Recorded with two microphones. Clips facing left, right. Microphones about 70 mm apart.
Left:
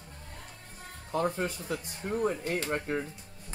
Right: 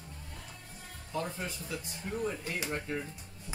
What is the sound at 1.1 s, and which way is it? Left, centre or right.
Speech, left.